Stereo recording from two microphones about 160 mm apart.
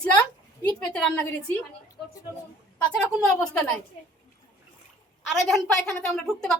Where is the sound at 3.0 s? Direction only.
5° left (ahead or behind).